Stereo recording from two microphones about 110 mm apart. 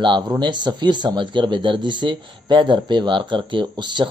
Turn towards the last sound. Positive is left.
turn(degrees=-45)  # may be behind; listen again after turning